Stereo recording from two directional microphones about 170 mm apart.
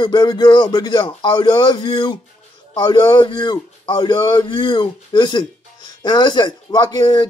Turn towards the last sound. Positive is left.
turn(degrees=25)  # may be behind; listen again after turning